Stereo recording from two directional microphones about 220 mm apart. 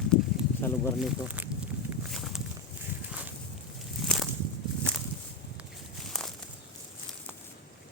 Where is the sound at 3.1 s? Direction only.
5° right (ahead or behind).